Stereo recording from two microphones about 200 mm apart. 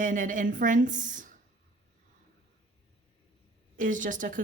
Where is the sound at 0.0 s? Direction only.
40° right (ahead or behind).